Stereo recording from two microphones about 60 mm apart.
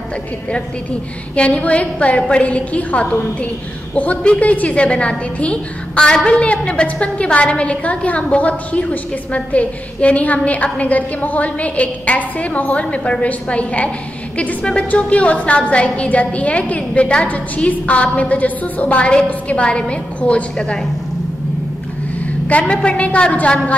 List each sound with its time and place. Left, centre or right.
1.3 s a woman's voice: centre
22.5 s a woman's voice: centre